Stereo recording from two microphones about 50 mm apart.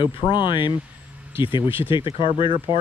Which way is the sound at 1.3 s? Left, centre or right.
Right.